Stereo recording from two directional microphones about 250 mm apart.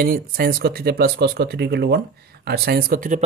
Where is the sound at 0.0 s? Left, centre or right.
Right.